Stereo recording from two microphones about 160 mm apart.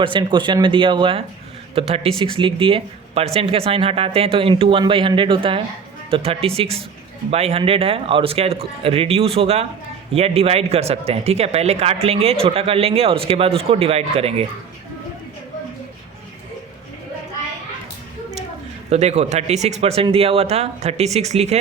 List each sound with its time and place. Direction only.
0.0 s speech: 30° right (ahead or behind)
18.9 s speech: 45° right (ahead or behind)